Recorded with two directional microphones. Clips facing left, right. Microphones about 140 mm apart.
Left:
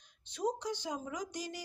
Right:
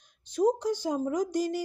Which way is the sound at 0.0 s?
45° right (ahead or behind).